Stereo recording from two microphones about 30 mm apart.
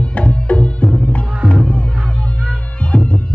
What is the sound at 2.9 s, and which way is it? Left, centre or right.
Music, left.